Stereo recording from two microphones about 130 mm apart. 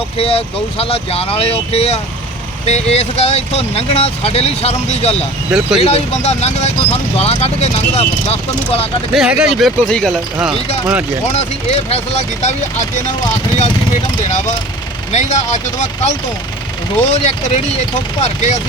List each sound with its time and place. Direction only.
0.2 s speech: 50° left (ahead or behind)
5.5 s speech: 5° right (ahead or behind)
5.8 s speech: 55° left (ahead or behind)
9.1 s speech: 5° right (ahead or behind)
11.3 s speech: 55° left (ahead or behind)
14.3 s speech: 65° left (ahead or behind)